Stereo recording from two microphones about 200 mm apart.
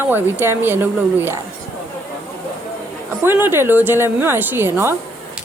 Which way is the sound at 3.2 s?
10° right (ahead or behind).